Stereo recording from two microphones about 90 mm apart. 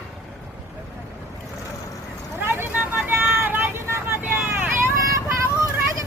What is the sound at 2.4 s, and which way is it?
Vehicle, 25° right (ahead or behind).